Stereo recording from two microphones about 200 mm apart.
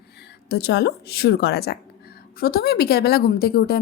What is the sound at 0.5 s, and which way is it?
A woman's voice, 55° left (ahead or behind).